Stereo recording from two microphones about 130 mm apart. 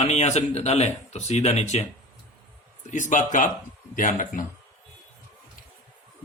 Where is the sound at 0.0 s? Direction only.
55° left (ahead or behind).